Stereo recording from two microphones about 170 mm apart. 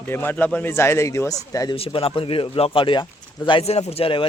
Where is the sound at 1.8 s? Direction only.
35° left (ahead or behind).